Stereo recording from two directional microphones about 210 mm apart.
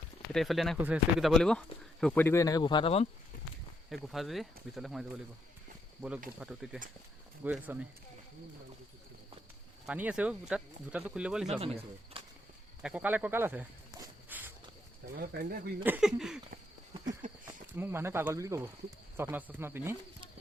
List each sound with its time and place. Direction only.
0.3 s speech: centre (ahead or behind); by 3.1 s 25° left (ahead or behind)
3.8 s speech: centre (ahead or behind)
6.4 s speech: 5° right (ahead or behind)
9.8 s speech: 5° right (ahead or behind)
11.6 s speech: 30° right (ahead or behind)
12.8 s snake: 5° right (ahead or behind)
15.1 s speech: 45° right (ahead or behind)
15.8 s speech: 5° right (ahead or behind)
17.2 s a sound: 40° right (ahead or behind)
17.7 s speech: 10° right (ahead or behind)